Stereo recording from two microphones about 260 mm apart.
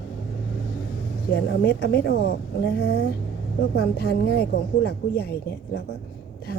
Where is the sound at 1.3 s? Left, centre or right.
Left.